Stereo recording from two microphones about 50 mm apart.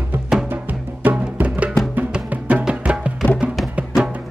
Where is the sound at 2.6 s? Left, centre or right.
Centre.